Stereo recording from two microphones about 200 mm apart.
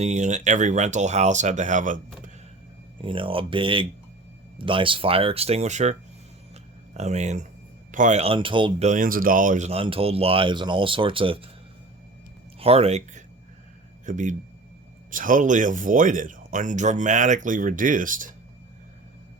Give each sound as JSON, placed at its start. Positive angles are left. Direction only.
{"t": 0.0, "sound": "speech", "side_deg": -35}
{"t": 3.0, "sound": "speech", "side_deg": -25}
{"t": 8.9, "sound": "speech", "side_deg": -45}
{"t": 12.5, "sound": "speech", "side_deg": -30}